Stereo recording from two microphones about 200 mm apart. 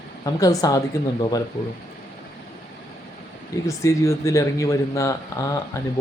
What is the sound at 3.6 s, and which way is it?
Speech, 15° left (ahead or behind).